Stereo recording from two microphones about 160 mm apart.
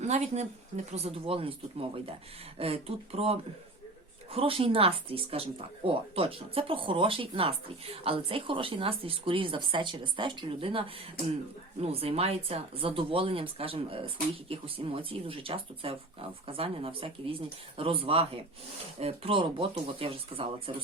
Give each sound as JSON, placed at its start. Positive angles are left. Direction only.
{"t": 0.0, "sound": "speech", "side_deg": -45}